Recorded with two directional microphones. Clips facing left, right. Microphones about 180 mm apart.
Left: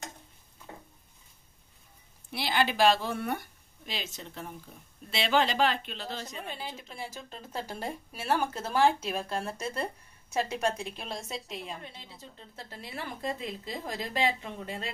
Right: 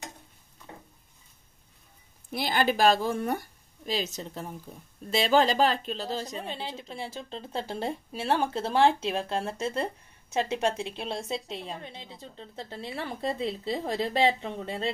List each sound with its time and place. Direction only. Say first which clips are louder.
2.3 s a woman's voice: right 2 dB; 45° right (ahead or behind)
6.3 s a woman's voice: right 4 dB; 25° right (ahead or behind)